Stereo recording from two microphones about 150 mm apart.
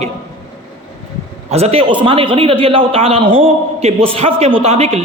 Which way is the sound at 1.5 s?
45° right (ahead or behind).